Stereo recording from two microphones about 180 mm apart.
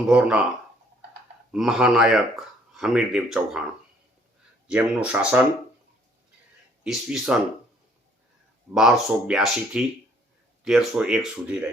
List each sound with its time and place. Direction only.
0.1 s speech: 5° right (ahead or behind)
1.5 s speech: centre (ahead or behind)
4.7 s speech: 5° right (ahead or behind)
6.8 s speech: centre (ahead or behind)
8.7 s speech: 5° right (ahead or behind)